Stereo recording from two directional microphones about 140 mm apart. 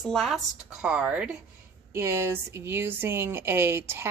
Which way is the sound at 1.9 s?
20° right (ahead or behind).